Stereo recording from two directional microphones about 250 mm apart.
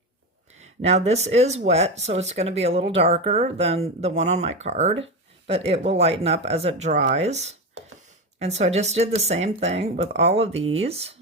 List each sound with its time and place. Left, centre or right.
0.6 s speech: right